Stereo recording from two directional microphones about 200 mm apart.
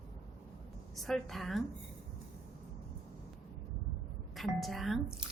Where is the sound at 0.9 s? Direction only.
Centre (ahead or behind).